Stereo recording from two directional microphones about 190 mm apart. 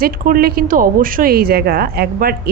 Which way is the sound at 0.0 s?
50° right (ahead or behind).